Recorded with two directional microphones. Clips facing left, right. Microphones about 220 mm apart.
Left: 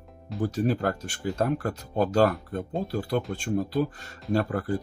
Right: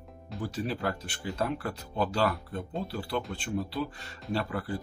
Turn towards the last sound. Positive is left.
turn(degrees=45)  # may be behind; listen again after turning